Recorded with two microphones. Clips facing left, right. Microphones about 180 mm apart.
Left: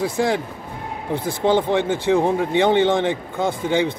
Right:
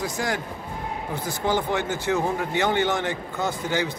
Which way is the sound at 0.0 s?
30° left (ahead or behind).